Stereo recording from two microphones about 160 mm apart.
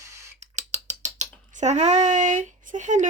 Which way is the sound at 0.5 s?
45° right (ahead or behind).